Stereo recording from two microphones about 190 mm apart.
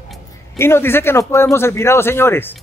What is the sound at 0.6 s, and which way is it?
Speech, 15° left (ahead or behind).